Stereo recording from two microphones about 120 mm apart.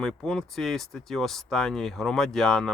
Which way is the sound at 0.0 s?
5° left (ahead or behind).